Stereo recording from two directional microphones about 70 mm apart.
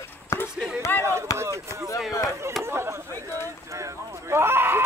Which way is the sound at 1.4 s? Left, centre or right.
Right.